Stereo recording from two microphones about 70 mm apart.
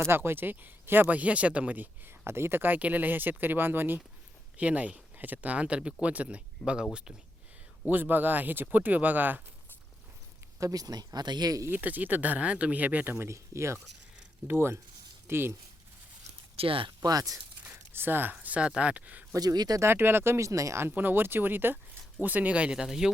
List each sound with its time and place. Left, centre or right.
0.0 s speech: right; by 7.2 s centre
7.9 s speech: right
10.6 s speech: right
11.7 s speech: right
13.1 s speech: right
17.0 s speech: right
17.6 s speech: right
19.3 s speech: right
19.8 s speech: right
20.8 s speech: right; by 23.1 s centre